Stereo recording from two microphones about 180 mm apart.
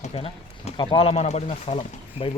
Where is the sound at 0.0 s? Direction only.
35° left (ahead or behind).